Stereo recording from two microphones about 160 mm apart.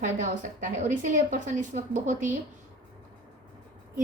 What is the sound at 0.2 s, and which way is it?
A woman's voice, 55° right (ahead or behind).